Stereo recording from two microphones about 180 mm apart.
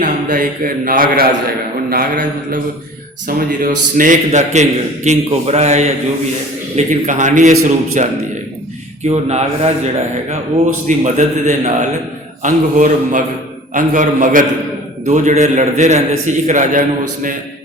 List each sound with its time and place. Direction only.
0.0 s a man's voice: 45° right (ahead or behind)
9.0 s a man's voice: 35° right (ahead or behind)
10.8 s a man's voice: 40° right (ahead or behind)